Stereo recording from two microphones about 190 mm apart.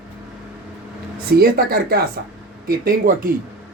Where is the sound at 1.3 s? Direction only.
55° right (ahead or behind).